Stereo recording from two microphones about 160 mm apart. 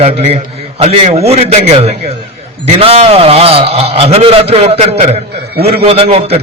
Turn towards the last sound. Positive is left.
turn(degrees=-40)  # may be behind; listen again after turning